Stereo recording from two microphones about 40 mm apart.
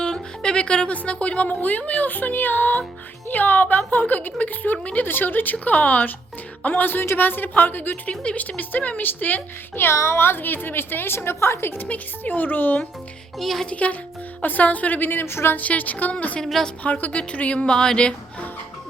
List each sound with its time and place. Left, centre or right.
0.0 s music: left
0.9 s a woman's voice: left
5.0 s speech: left
7.0 s a woman's voice: left
8.4 s speech: left
9.7 s a woman's voice: left
12.2 s speech: left
13.4 s speech: centre
13.7 s a woman's voice: left
15.2 s speech: left
15.5 s a woman's voice: left
17.7 s a sound: centre